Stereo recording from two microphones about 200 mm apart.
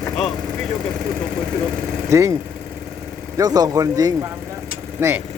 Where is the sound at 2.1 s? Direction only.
15° right (ahead or behind).